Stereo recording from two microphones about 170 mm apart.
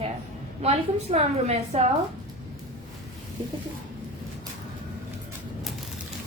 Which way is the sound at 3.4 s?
30° right (ahead or behind).